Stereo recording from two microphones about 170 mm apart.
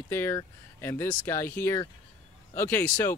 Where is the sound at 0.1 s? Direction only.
15° left (ahead or behind).